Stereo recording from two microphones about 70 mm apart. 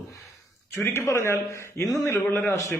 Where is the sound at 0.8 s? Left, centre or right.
Left.